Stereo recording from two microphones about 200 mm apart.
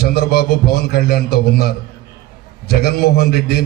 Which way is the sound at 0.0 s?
50° left (ahead or behind).